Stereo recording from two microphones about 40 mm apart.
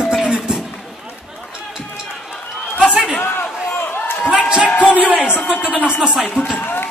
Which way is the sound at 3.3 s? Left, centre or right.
Left.